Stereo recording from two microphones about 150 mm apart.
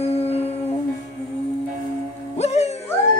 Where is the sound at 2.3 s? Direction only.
45° left (ahead or behind).